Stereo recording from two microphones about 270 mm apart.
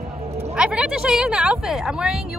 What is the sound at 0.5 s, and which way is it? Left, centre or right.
Speech, centre.